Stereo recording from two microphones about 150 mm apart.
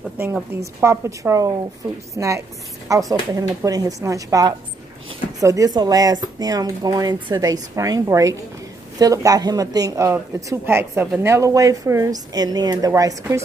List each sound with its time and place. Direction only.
0.2 s speech: 10° right (ahead or behind)